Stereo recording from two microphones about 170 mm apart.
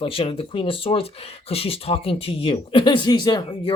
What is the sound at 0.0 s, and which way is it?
Speech, 35° left (ahead or behind).